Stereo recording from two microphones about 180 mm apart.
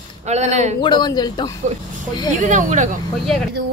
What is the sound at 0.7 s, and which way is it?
Speech, 25° left (ahead or behind).